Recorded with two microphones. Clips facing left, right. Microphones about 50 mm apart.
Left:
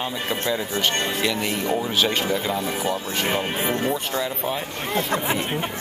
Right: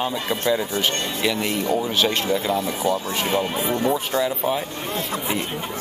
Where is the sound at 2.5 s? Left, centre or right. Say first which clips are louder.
Right 2 dB; left.